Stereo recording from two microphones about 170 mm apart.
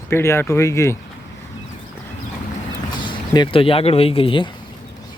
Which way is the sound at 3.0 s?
25° left (ahead or behind).